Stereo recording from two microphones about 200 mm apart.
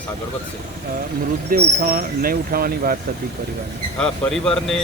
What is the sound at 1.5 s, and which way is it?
Speech, 45° right (ahead or behind).